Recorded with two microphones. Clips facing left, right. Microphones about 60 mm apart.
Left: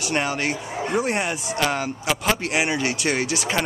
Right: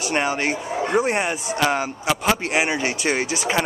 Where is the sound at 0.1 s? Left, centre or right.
Centre.